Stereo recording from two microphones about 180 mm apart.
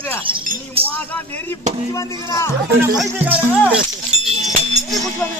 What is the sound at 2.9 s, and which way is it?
Speech, 5° right (ahead or behind).